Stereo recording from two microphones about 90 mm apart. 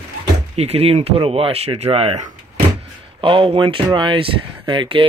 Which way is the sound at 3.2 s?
70° right (ahead or behind).